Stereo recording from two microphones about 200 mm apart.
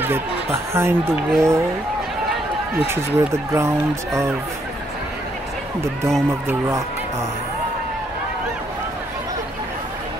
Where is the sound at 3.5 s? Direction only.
15° right (ahead or behind).